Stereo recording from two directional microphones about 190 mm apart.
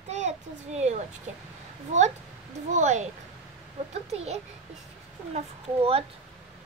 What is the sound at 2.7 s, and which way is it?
A child's voice, 40° right (ahead or behind).